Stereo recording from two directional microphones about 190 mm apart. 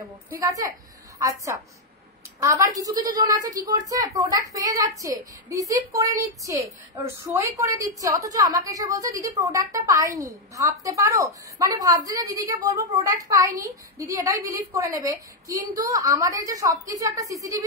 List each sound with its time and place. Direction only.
0.4 s a woman's voice: 15° right (ahead or behind)